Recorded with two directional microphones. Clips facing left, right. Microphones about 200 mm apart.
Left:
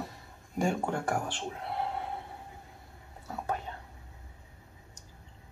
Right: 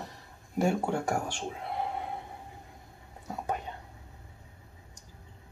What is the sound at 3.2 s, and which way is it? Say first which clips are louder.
Whispering: right 1 dB; 15° right (ahead or behind).